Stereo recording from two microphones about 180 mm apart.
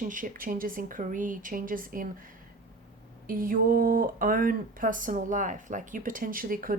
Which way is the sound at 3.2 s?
50° right (ahead or behind).